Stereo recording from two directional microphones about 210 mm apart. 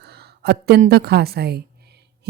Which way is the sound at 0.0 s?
50° right (ahead or behind).